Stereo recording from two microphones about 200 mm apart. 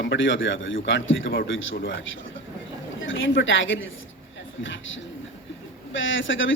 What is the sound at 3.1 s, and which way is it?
Speech, 70° left (ahead or behind).